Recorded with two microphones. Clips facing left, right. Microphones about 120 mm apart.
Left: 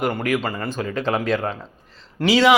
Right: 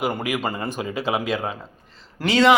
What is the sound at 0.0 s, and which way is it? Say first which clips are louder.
A man's voice: left 2 dB; 10° right (ahead or behind).